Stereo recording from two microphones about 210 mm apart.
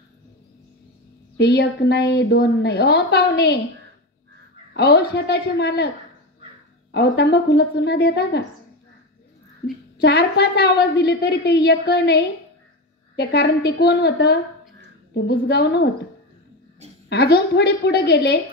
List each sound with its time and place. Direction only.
1.4 s a woman's voice: 55° left (ahead or behind)
4.7 s a woman's voice: 50° left (ahead or behind)
6.9 s a woman's voice: 50° left (ahead or behind)
9.7 s a woman's voice: 50° left (ahead or behind)
17.1 s a woman's voice: 50° left (ahead or behind)